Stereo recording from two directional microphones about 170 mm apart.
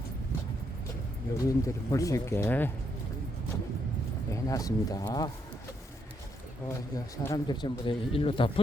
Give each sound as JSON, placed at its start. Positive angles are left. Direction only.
{"t": 1.5, "sound": "speech", "side_deg": 20}
{"t": 4.3, "sound": "speech", "side_deg": 20}
{"t": 6.7, "sound": "speech", "side_deg": 15}